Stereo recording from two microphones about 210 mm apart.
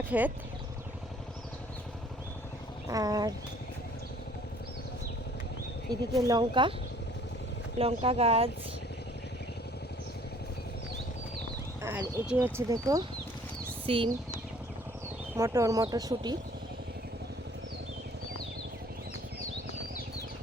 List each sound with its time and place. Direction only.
0.1 s speech: 5° right (ahead or behind)
2.9 s speech: 15° right (ahead or behind)
6.2 s speech: 20° right (ahead or behind)
7.8 s speech: 25° right (ahead or behind)
11.8 s speech: 10° right (ahead or behind)
15.4 s speech: 15° right (ahead or behind)